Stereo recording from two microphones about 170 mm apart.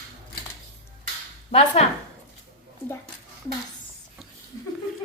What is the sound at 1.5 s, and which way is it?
Speech, 40° left (ahead or behind).